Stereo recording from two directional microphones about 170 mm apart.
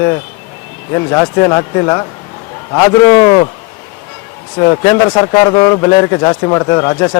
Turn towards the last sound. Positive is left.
turn(degrees=20)  # may be behind; listen again after turning